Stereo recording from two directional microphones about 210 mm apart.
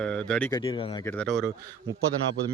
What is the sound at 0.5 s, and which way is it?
Speech, 20° left (ahead or behind).